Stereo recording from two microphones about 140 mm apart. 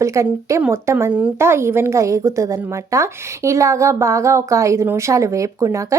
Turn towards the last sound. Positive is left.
turn(degrees=-20)  # may be behind; listen again after turning